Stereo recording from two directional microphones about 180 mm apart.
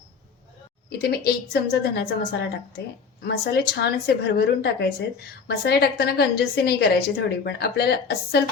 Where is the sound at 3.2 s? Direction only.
65° left (ahead or behind).